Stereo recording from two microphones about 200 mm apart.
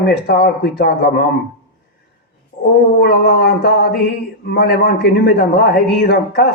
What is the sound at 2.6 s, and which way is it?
Speech, 50° left (ahead or behind).